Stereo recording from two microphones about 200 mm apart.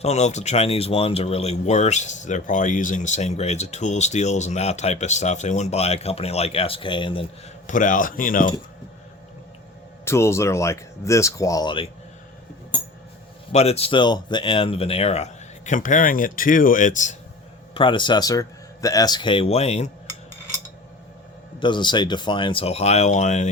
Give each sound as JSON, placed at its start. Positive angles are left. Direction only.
{"t": 0.0, "sound": "speech", "side_deg": 35}
{"t": 7.7, "sound": "speech", "side_deg": 40}
{"t": 10.1, "sound": "speech", "side_deg": 15}
{"t": 13.5, "sound": "speech", "side_deg": 30}
{"t": 17.7, "sound": "speech", "side_deg": 25}
{"t": 21.6, "sound": "speech", "side_deg": 25}